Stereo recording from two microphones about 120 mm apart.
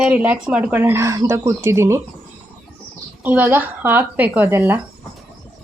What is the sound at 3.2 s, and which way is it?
Speech, 15° right (ahead or behind).